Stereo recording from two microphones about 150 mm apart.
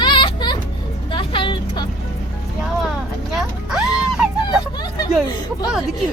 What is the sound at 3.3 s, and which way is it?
Vehicle, 5° right (ahead or behind).